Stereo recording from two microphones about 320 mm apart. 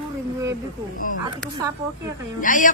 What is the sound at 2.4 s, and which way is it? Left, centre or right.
Speech, left.